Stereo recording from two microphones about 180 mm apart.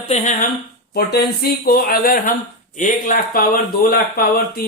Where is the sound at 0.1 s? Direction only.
40° left (ahead or behind).